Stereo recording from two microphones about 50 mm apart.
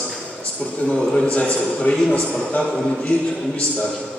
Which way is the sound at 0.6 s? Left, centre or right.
Left.